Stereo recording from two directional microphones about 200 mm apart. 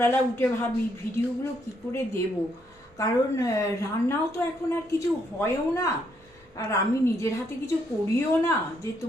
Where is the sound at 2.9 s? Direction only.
15° left (ahead or behind).